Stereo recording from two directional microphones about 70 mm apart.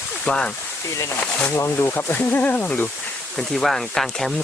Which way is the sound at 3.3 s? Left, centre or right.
Centre.